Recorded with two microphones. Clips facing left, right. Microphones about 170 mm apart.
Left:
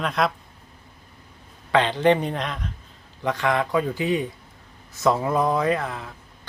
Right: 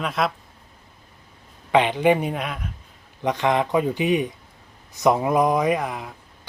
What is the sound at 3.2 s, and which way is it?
A man's voice, 20° right (ahead or behind).